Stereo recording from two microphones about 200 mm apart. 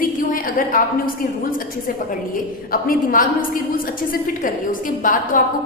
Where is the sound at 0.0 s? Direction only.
45° left (ahead or behind).